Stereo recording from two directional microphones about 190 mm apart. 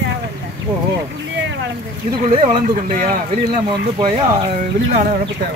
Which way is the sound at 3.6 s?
30° right (ahead or behind).